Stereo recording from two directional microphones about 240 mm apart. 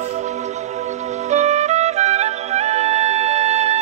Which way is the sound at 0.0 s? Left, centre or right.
Right.